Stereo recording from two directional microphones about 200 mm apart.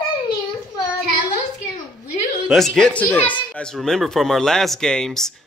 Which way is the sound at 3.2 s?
25° left (ahead or behind).